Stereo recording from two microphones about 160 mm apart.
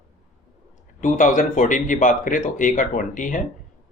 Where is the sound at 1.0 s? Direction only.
50° left (ahead or behind).